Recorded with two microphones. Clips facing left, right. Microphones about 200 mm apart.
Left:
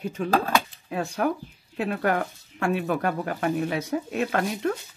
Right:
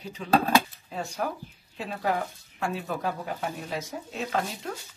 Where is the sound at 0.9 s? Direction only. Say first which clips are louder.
Left 6 dB; 65° left (ahead or behind).